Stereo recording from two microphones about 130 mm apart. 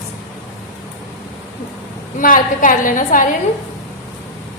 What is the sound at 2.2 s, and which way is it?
A woman's voice, 90° left.